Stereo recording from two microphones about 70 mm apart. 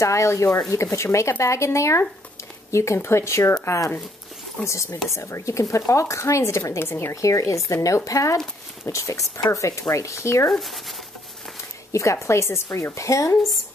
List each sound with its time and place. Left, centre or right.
0.0 s speech: left
7.2 s speech: left
10.5 s speech: centre
11.9 s speech: left